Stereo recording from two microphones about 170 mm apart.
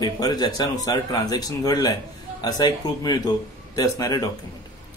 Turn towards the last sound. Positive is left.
turn(degrees=20)  # may be behind; listen again after turning